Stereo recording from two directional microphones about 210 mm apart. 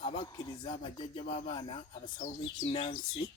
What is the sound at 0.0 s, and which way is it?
Rapping, 20° left (ahead or behind).